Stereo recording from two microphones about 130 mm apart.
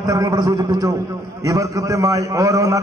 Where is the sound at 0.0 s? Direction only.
25° right (ahead or behind).